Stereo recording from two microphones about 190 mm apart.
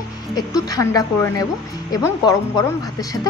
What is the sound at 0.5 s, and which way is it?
Speech, 20° left (ahead or behind).